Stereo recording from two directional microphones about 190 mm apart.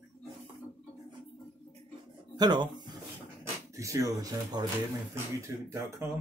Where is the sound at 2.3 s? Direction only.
20° right (ahead or behind).